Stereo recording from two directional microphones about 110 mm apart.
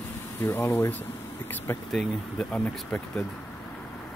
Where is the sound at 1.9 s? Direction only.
10° left (ahead or behind).